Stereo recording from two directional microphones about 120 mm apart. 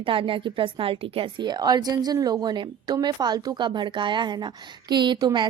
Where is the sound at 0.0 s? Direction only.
45° right (ahead or behind).